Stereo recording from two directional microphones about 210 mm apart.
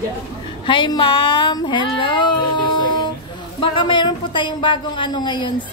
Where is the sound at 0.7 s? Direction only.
20° left (ahead or behind).